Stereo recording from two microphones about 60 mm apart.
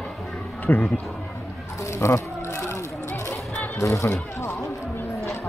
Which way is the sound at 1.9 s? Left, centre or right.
Left.